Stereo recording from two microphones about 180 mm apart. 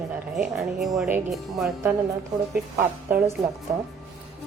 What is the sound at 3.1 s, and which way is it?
Speech, 15° right (ahead or behind).